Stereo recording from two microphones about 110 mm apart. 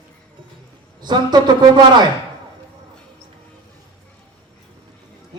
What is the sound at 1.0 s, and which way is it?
Speech, 40° right (ahead or behind).